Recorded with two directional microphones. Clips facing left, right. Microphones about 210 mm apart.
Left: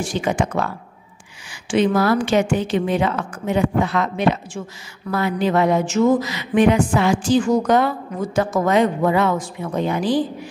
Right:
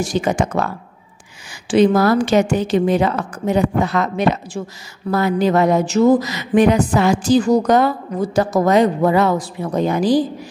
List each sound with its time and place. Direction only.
0.0 s speech: 40° right (ahead or behind)